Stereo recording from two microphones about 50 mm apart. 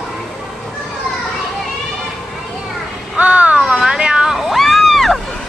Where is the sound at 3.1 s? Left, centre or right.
Right; by 5.2 s centre.